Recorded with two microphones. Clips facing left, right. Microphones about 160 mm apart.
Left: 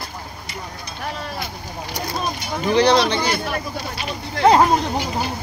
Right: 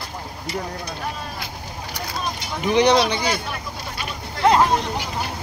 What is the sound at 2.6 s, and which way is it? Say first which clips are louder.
Speech: left 1 dB; 15° right (ahead or behind).